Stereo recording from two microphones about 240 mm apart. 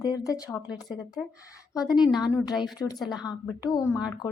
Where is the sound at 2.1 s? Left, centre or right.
Centre.